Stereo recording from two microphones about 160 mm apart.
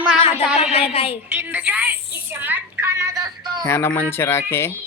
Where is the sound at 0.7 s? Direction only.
40° left (ahead or behind).